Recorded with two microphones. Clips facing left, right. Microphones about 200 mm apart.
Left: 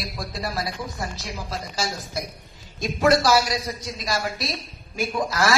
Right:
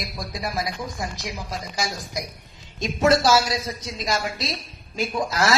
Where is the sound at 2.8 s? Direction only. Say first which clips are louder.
Even; 25° right (ahead or behind).